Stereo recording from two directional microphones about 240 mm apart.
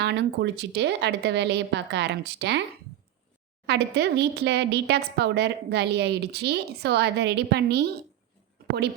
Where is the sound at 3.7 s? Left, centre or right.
Right.